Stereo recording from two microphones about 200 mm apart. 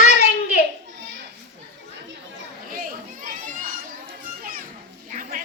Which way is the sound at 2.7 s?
45° right (ahead or behind).